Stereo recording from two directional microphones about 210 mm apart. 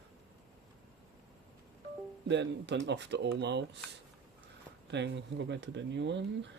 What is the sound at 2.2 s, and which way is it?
Speech, 55° right (ahead or behind).